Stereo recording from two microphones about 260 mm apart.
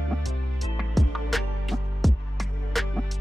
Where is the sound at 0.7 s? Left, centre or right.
Centre.